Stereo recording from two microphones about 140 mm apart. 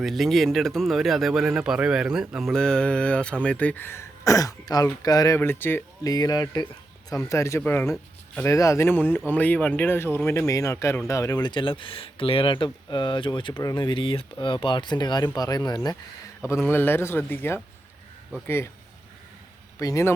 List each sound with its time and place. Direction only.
0.0 s speech: centre (ahead or behind); by 13.5 s 35° left (ahead or behind)
13.5 s speech: 20° left (ahead or behind)
13.7 s speech: 35° left (ahead or behind)
16.5 s speech: 15° left (ahead or behind)
19.8 s speech: 20° left (ahead or behind)